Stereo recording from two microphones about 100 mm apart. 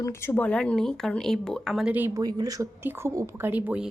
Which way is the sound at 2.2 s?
40° right (ahead or behind).